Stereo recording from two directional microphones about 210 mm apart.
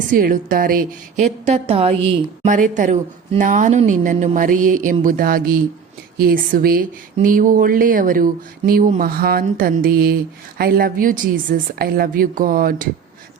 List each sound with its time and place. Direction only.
0.1 s a woman's voice: 40° right (ahead or behind)